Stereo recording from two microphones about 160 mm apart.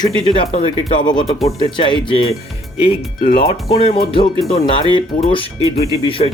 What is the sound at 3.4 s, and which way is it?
Speech, 35° left (ahead or behind).